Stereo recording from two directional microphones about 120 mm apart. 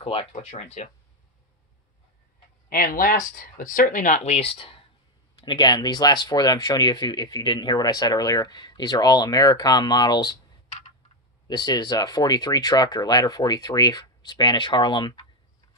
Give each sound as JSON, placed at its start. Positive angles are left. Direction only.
{"t": 0.0, "sound": "speech", "side_deg": 55}
{"t": 3.8, "sound": "speech", "side_deg": 90}
{"t": 5.4, "sound": "speech", "side_deg": 40}
{"t": 11.4, "sound": "speech", "side_deg": 35}